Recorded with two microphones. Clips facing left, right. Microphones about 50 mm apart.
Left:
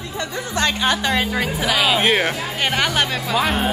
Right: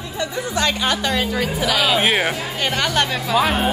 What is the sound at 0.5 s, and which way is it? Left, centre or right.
A woman's voice, left.